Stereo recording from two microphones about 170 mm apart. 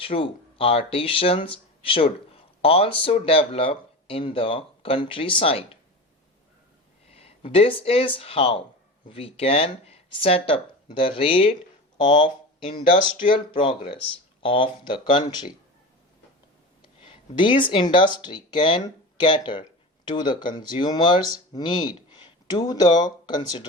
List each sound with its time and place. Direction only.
0.0 s speech: 35° left (ahead or behind)
7.1 s speech: 35° left (ahead or behind)
16.8 s speech: 30° left (ahead or behind)